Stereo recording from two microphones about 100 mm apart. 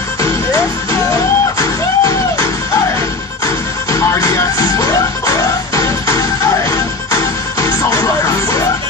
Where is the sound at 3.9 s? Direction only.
30° left (ahead or behind).